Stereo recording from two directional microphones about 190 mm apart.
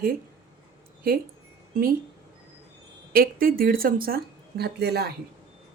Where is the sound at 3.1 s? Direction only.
50° right (ahead or behind).